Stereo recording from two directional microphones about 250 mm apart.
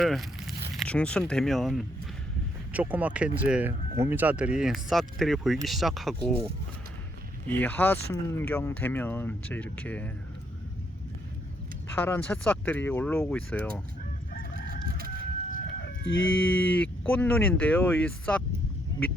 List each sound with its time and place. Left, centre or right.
0.0 s speech: centre
7.4 s speech: centre
11.9 s speech: centre
14.5 s chicken: right
15.4 s chicken: left
16.0 s speech: left
16.6 s speech: centre